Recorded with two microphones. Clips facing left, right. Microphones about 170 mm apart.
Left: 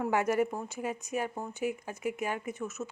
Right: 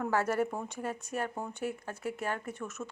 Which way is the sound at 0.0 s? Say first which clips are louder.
Left 2 dB; 15° left (ahead or behind).